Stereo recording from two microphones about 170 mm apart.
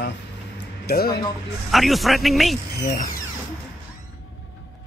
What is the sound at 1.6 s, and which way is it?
Speech, centre (ahead or behind).